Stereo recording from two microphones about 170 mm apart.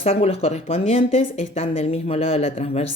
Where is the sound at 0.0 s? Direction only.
35° left (ahead or behind).